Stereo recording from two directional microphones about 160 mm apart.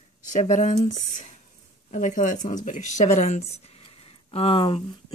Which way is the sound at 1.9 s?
50° left (ahead or behind).